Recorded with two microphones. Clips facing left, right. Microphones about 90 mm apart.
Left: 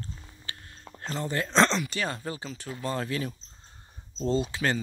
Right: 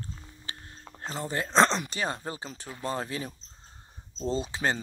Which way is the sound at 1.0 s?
15° right (ahead or behind).